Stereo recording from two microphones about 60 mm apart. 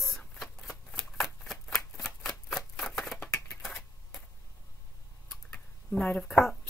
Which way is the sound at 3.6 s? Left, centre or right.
Centre.